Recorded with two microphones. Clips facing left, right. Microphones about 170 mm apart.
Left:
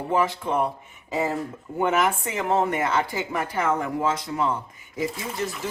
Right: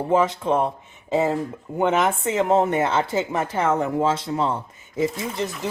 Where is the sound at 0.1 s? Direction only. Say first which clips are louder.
Right 4 dB; 20° right (ahead or behind).